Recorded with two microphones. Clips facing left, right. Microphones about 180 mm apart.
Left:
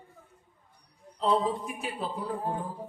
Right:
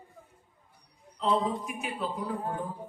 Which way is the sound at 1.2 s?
35° left (ahead or behind).